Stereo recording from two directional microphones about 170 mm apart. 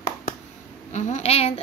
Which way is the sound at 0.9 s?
45° left (ahead or behind).